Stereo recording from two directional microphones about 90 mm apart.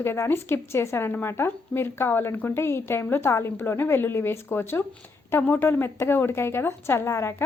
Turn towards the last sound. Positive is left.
turn(degrees=30)  # may be behind; listen again after turning